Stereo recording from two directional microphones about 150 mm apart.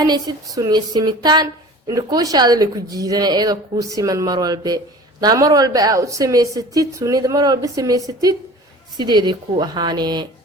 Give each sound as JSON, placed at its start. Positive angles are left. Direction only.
{"t": 0.0, "sound": "a woman's voice", "side_deg": -25}